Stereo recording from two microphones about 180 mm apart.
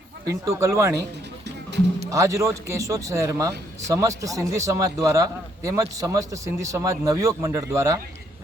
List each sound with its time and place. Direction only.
0.3 s a man's voice: 15° right (ahead or behind)
2.0 s a man's voice: 15° right (ahead or behind)